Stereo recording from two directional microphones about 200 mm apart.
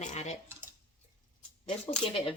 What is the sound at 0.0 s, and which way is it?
Speech, 35° left (ahead or behind).